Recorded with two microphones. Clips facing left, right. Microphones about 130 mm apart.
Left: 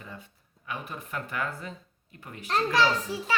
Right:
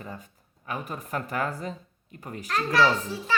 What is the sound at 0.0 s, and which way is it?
A child's voice, 40° right (ahead or behind).